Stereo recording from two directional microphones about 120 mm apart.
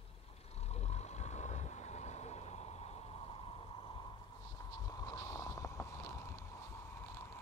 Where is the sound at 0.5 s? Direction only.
60° left (ahead or behind).